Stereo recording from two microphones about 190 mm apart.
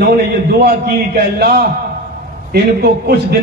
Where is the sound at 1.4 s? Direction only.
55° right (ahead or behind).